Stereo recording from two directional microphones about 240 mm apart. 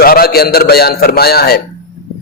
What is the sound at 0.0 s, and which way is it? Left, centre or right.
A man's voice, left.